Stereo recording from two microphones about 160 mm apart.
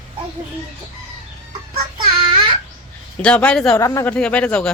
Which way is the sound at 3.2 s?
5° left (ahead or behind).